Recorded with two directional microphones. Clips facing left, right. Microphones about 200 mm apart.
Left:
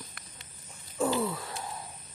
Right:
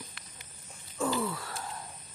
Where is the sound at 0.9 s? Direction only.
20° left (ahead or behind).